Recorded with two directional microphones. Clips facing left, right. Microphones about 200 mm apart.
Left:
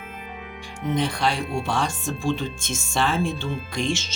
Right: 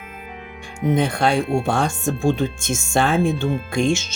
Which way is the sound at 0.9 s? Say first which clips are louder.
Right 5 dB; 50° right (ahead or behind).